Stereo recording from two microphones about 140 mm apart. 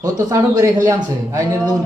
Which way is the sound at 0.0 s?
25° right (ahead or behind).